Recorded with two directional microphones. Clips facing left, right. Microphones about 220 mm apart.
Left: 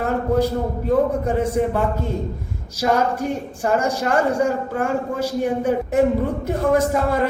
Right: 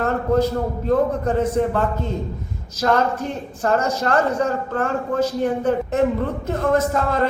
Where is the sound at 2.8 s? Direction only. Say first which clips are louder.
Even; 10° left (ahead or behind).